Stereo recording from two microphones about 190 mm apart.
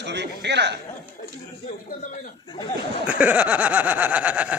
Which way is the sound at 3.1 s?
5° right (ahead or behind).